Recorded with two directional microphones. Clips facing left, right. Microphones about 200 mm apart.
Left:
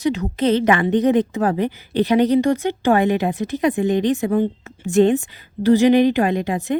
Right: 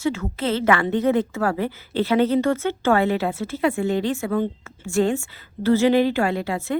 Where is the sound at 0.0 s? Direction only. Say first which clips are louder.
Left 5 dB; 20° left (ahead or behind).